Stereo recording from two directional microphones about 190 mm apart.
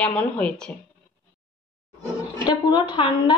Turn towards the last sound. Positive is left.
turn(degrees=25)  # may be behind; listen again after turning